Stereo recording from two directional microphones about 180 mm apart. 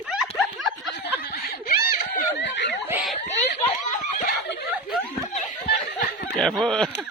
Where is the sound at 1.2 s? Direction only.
60° left (ahead or behind).